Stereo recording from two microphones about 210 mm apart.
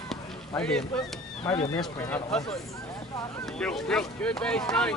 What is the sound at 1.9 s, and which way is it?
Speech, 15° left (ahead or behind).